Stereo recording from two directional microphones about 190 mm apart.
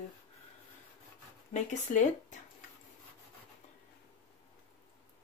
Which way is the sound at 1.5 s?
40° left (ahead or behind).